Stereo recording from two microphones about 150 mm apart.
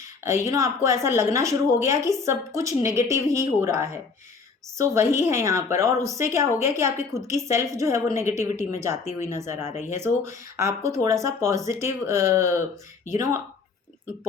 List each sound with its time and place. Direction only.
0.0 s a woman's voice: 20° right (ahead or behind)
8.9 s speech: 50° left (ahead or behind)
9.2 s speech: 20° right (ahead or behind)
9.6 s speech: 50° left (ahead or behind)
10.0 s speech: 20° right (ahead or behind)